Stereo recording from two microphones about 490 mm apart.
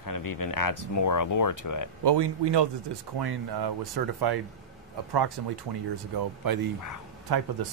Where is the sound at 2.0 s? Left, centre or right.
Right.